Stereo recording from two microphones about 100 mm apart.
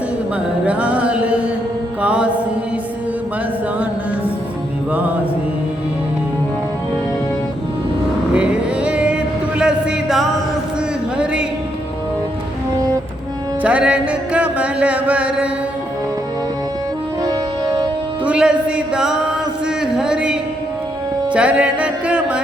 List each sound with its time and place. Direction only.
0.6 s music: 15° right (ahead or behind)
2.0 s mantra: 10° right (ahead or behind)
4.9 s music: 15° right (ahead or behind)
8.3 s music: 10° right (ahead or behind)
13.6 s music: 15° right (ahead or behind)
17.2 s music: 35° right (ahead or behind)
18.3 s music: 10° right (ahead or behind)
19.6 s a sound: 5° right (ahead or behind)
21.3 s music: 15° right (ahead or behind)